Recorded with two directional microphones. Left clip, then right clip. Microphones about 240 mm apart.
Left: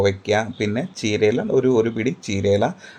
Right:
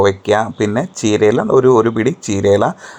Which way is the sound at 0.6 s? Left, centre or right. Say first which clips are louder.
Right 7 dB; right.